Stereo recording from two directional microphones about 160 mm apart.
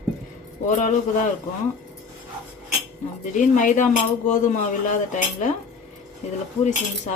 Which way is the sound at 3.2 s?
50° left (ahead or behind).